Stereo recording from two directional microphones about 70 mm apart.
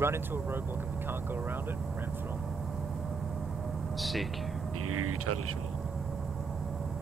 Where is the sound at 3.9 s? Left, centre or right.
Centre.